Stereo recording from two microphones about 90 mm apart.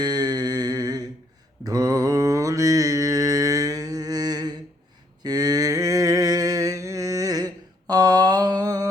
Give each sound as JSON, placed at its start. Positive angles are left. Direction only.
{"t": 0.0, "sound": "humming", "side_deg": -50}
{"t": 1.6, "sound": "mantra", "side_deg": -45}
{"t": 5.2, "sound": "a sound", "side_deg": -45}